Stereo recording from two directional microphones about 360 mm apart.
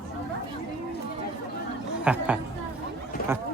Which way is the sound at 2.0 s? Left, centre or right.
Centre.